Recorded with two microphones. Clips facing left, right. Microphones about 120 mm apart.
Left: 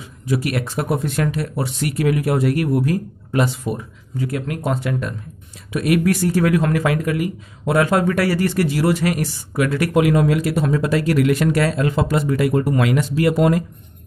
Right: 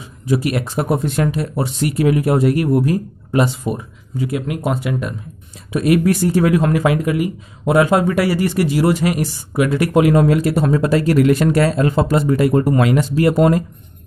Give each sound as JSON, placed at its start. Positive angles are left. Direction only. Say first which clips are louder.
{"t": 0.3, "sound": "speech", "louder": "right 3 dB", "side_deg": -25}
{"t": 5.7, "sound": "speech", "louder": "right 3 dB", "side_deg": -25}